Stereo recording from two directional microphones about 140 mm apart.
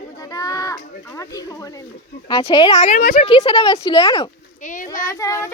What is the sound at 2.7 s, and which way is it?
Speech, 55° left (ahead or behind).